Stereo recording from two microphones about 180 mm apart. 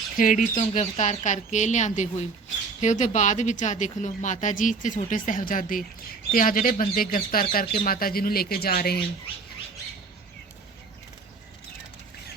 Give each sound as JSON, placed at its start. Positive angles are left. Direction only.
{"t": 0.2, "sound": "speech", "side_deg": 45}